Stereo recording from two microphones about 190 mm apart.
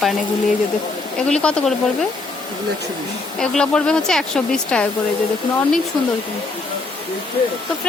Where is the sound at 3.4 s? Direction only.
5° left (ahead or behind).